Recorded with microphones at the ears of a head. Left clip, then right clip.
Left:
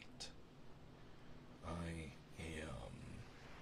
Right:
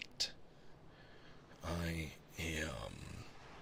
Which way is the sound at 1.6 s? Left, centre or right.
Right.